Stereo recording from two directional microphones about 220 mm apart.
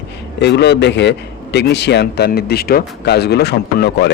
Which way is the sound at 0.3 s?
50° left (ahead or behind).